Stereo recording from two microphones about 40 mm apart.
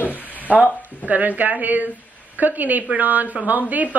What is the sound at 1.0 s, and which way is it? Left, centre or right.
Speech, right.